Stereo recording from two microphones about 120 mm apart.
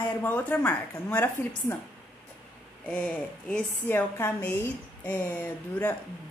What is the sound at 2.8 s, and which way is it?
Speech, 5° left (ahead or behind).